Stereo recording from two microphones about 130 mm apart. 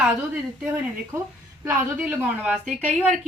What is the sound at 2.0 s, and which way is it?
Speech, 10° right (ahead or behind).